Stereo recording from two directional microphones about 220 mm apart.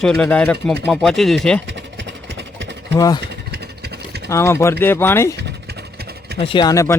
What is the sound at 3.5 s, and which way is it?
Vehicle, 45° right (ahead or behind).